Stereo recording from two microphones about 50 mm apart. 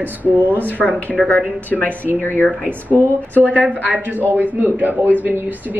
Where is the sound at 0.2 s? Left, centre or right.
Right.